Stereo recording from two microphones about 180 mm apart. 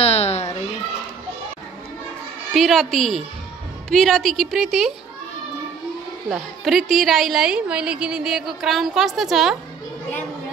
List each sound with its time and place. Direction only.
0.0 s a sound: 35° left (ahead or behind)
2.5 s a woman's voice: centre (ahead or behind)
6.3 s a woman's voice: centre (ahead or behind)